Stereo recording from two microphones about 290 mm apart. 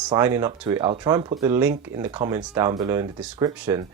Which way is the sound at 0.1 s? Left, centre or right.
Centre.